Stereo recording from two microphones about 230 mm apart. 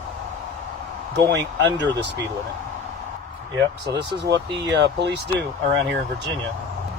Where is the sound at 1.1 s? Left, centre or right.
Right.